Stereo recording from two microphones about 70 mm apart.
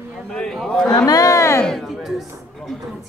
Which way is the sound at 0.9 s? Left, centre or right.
Left.